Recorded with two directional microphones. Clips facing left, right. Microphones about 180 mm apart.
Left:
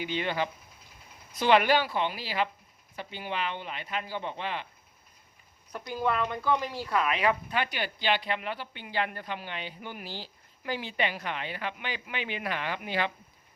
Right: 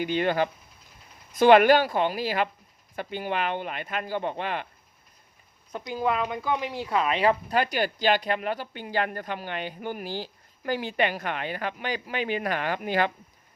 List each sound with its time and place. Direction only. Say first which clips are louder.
0.0 s speech: right 6 dB; 45° right (ahead or behind)
5.7 s speech: right 3 dB; 15° right (ahead or behind); by 13.1 s 50° right (ahead or behind)